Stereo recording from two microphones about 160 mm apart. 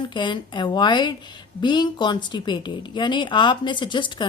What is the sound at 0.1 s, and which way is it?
A woman's voice, 30° left (ahead or behind).